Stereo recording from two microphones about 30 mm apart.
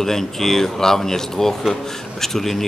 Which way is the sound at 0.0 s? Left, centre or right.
Centre.